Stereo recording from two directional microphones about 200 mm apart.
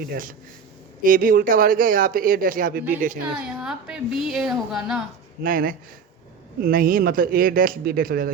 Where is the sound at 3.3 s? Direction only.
5° right (ahead or behind).